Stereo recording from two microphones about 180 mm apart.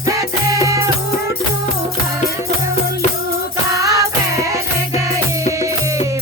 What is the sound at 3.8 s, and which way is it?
Music, 20° right (ahead or behind).